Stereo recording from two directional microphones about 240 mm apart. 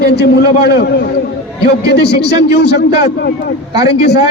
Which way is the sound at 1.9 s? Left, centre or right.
Left.